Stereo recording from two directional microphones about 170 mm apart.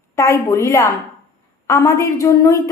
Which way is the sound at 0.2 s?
15° left (ahead or behind).